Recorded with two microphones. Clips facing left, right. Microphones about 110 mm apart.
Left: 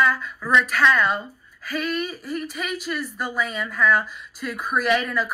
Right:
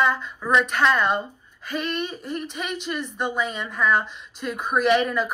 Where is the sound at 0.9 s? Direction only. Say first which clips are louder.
Even; centre (ahead or behind).